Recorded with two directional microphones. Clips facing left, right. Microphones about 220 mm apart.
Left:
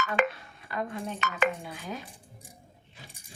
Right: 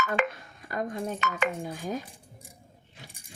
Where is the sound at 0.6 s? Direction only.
45° right (ahead or behind).